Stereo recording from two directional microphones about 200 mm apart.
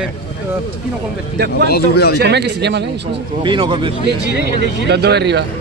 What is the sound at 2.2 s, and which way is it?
Speech, 55° right (ahead or behind).